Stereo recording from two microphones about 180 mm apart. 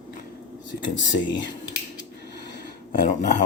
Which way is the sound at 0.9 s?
90° left.